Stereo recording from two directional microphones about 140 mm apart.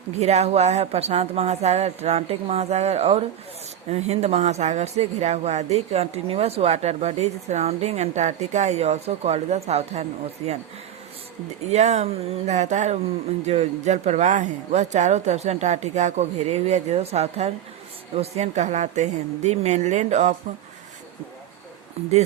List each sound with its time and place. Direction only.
0.2 s speech: 50° right (ahead or behind)
11.6 s a woman's voice: 50° right (ahead or behind)